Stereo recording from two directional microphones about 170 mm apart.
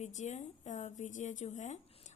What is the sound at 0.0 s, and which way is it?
Speech, 45° left (ahead or behind).